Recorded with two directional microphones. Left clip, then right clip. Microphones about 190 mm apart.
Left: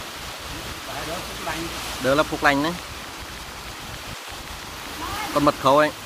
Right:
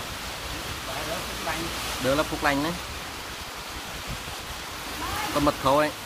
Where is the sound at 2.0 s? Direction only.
25° left (ahead or behind).